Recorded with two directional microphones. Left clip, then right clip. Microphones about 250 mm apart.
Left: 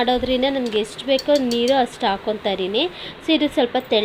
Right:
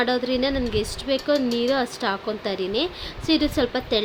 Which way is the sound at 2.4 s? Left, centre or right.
Right.